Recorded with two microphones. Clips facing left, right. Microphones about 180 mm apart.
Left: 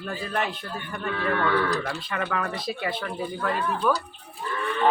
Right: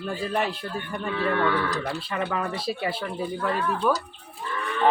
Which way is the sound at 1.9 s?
30° right (ahead or behind).